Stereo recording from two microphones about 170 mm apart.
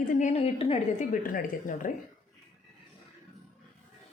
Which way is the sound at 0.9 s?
55° left (ahead or behind).